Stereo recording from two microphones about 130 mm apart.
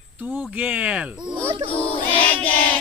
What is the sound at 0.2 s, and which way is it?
Cricket, 10° right (ahead or behind).